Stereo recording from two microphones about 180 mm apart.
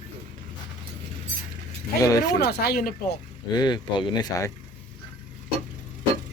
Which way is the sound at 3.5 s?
25° left (ahead or behind).